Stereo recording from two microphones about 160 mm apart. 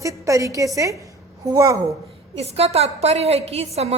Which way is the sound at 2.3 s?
40° right (ahead or behind).